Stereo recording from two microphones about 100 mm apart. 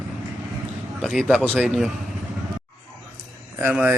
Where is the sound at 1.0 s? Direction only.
5° left (ahead or behind).